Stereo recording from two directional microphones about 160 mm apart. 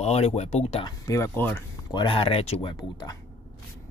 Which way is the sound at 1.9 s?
30° left (ahead or behind).